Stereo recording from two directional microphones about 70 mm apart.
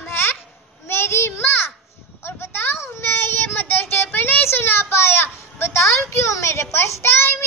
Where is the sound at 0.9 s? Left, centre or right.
Left.